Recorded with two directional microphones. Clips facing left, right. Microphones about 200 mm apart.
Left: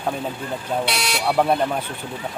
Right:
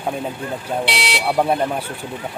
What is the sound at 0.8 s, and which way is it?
Speech, 25° right (ahead or behind).